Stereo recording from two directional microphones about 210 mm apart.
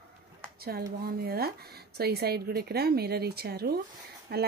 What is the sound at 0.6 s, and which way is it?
Speech, 45° right (ahead or behind).